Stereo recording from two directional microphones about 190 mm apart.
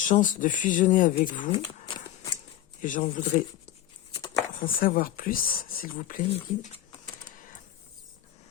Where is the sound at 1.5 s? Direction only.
25° left (ahead or behind).